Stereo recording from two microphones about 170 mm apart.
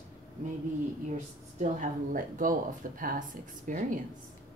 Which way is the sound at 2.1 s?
50° right (ahead or behind).